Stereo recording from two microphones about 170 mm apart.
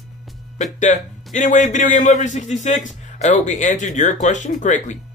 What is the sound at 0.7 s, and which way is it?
Speech, 45° left (ahead or behind).